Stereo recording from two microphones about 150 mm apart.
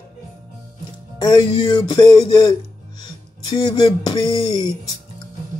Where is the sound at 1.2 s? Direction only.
25° left (ahead or behind).